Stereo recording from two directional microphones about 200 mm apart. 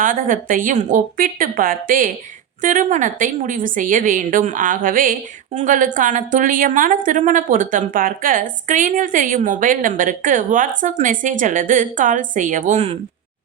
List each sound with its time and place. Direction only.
0.0 s a woman's voice: 40° right (ahead or behind)